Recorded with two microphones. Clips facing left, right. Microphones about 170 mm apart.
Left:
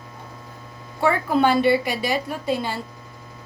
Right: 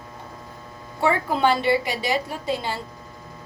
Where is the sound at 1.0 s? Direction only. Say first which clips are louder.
Left 2 dB; 20° right (ahead or behind).